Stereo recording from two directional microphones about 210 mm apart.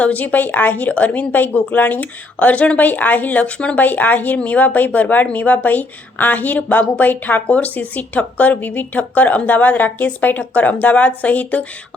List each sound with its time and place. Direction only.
0.0 s speech: 5° left (ahead or behind)